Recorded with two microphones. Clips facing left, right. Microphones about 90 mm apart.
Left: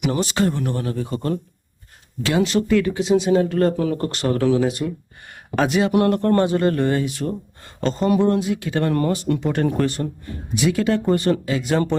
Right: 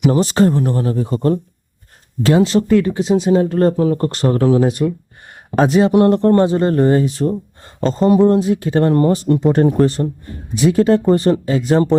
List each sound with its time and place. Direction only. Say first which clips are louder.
0.0 s speech: right 7 dB; 35° right (ahead or behind)